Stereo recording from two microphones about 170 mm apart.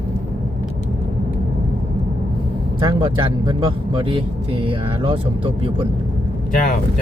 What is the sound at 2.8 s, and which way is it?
Speech, 25° right (ahead or behind).